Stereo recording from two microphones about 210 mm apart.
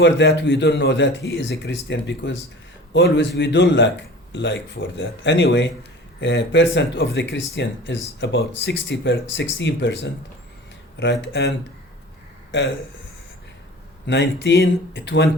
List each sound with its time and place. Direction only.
0.0 s speech: 60° left (ahead or behind)
14.1 s speech: 55° left (ahead or behind)